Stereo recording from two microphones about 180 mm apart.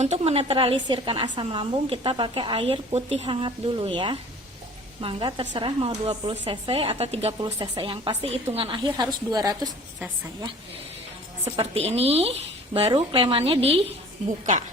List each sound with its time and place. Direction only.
0.0 s a woman's voice: 35° right (ahead or behind)
11.5 s a woman's voice: 35° right (ahead or behind)